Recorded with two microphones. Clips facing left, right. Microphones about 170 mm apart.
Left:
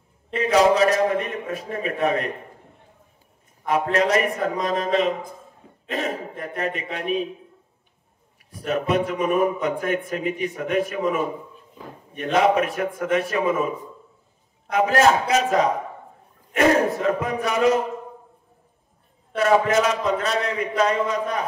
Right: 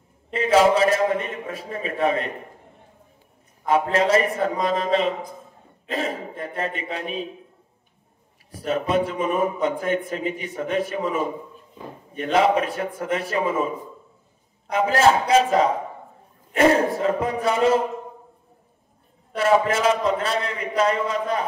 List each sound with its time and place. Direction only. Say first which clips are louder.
0.3 s a man's voice: even; 30° right (ahead or behind)
3.6 s a man's voice: right 1 dB; 30° right (ahead or behind)
8.5 s a man's voice: even; 30° right (ahead or behind)
12.2 s a man's voice: even; 30° right (ahead or behind)
14.7 s a man's voice: even; 30° right (ahead or behind)
19.3 s a man's voice: left 1 dB; 30° right (ahead or behind)